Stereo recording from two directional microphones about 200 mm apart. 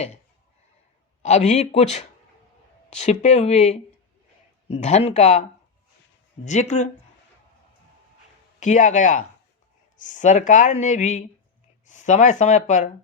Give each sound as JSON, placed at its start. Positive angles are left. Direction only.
{"t": 1.2, "sound": "speech", "side_deg": 35}
{"t": 8.6, "sound": "speech", "side_deg": 40}